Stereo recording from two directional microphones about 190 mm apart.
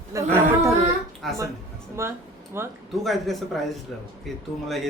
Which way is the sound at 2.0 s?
15° right (ahead or behind).